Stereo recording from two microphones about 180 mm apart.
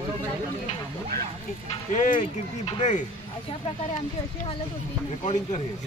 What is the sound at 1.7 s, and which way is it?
Speech, 45° left (ahead or behind).